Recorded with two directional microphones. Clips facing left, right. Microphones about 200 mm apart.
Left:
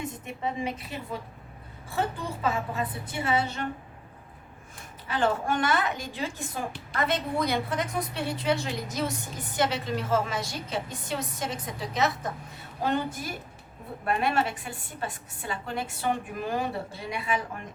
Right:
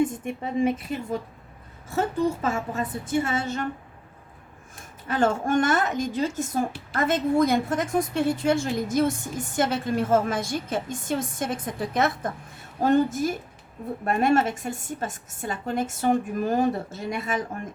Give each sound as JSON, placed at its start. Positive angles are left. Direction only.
{"t": 0.0, "sound": "a woman's voice", "side_deg": -50}
{"t": 5.0, "sound": "a woman's voice", "side_deg": -45}